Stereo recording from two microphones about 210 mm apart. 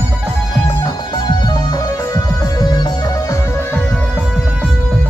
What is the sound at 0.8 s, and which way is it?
Music, 20° left (ahead or behind).